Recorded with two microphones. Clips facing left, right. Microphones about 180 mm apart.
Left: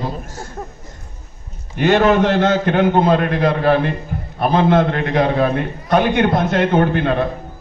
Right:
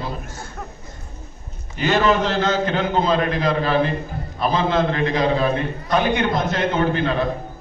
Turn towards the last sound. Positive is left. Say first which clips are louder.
# left 4 dB
turn(degrees=55)  # may be behind; listen again after turning